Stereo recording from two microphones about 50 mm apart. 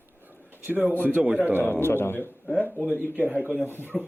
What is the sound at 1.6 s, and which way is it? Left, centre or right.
Speech, left.